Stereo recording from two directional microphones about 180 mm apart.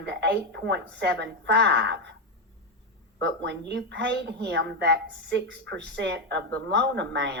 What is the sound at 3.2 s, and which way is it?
Speech, 70° right (ahead or behind).